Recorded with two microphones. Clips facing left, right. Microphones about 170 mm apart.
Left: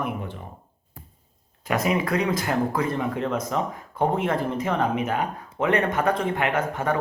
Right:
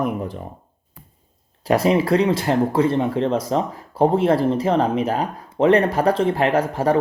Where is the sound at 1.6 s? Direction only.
35° right (ahead or behind).